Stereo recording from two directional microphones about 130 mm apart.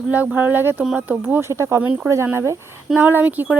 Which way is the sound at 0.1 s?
10° right (ahead or behind).